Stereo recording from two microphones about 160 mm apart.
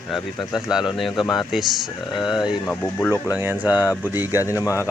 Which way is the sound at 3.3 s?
10° right (ahead or behind).